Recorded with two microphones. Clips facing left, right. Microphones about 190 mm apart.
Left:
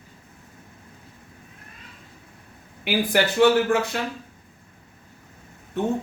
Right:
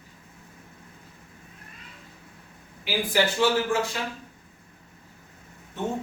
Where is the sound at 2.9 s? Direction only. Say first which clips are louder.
Left 5 dB; 60° left (ahead or behind).